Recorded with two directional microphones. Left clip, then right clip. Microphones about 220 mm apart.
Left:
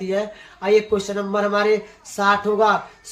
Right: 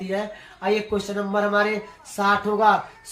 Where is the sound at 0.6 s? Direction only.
25° left (ahead or behind).